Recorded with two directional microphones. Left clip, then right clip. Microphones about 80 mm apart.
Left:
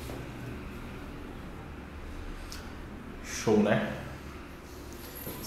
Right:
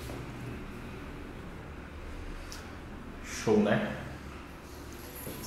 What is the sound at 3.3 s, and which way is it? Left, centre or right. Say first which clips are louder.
Speech: left 1 dB; centre.